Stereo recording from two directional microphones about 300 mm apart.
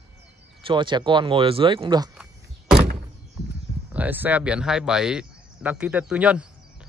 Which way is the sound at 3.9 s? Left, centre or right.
Centre.